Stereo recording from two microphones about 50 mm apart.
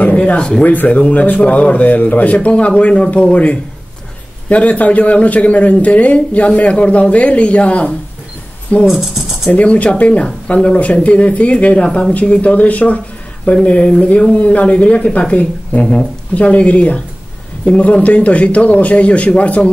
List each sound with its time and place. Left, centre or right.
0.0 s speech: left
0.7 s a man's voice: left
8.8 s speech: centre
9.5 s a man's voice: left
12.1 s a man's voice: left
15.8 s a man's voice: centre